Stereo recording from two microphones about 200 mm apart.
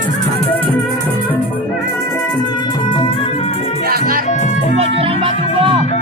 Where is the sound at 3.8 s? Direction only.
50° right (ahead or behind).